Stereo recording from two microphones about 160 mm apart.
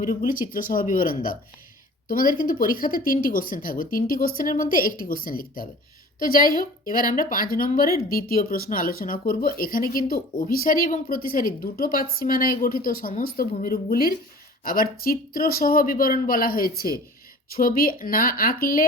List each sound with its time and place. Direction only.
0.0 s speech: 60° left (ahead or behind)